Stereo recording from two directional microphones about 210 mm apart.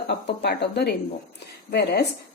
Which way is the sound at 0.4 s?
50° left (ahead or behind).